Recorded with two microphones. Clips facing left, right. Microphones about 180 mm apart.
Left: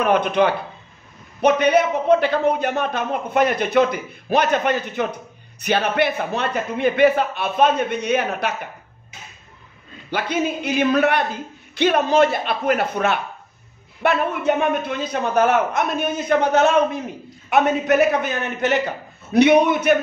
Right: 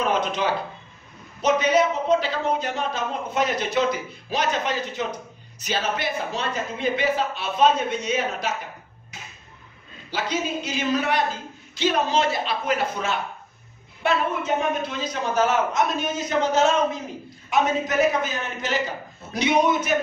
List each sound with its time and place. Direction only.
0.0 s a man's voice: 60° left (ahead or behind)
10.1 s a man's voice: 55° left (ahead or behind)